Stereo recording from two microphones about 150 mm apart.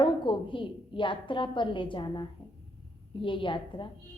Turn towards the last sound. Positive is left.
turn(degrees=35)  # may be behind; listen again after turning